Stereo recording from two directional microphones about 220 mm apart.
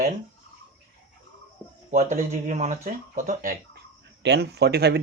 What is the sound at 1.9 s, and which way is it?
Speech, 30° right (ahead or behind).